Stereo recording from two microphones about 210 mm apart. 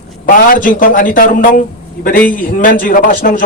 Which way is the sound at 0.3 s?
40° left (ahead or behind).